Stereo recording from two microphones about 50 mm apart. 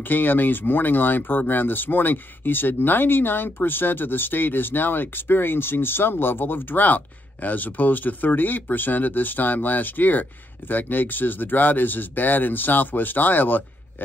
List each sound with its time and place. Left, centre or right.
0.1 s speech: left